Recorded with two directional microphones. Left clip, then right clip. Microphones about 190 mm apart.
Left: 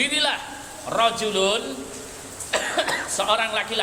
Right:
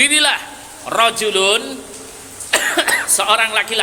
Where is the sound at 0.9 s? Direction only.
40° right (ahead or behind).